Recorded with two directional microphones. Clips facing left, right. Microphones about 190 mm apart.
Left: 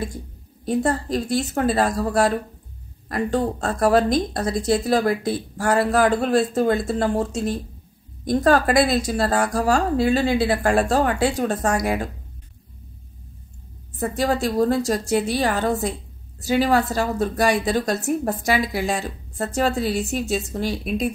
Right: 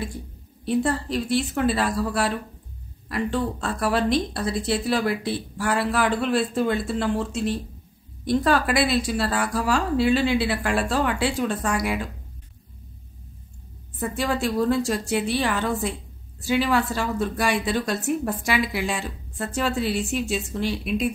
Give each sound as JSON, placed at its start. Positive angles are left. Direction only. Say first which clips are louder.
{"t": 0.7, "sound": "speech", "louder": "left 2 dB", "side_deg": 45}
{"t": 13.9, "sound": "a woman's voice", "louder": "left 3 dB", "side_deg": 40}